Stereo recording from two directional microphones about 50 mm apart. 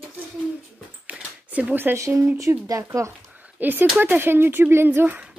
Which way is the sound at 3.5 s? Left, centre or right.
Right.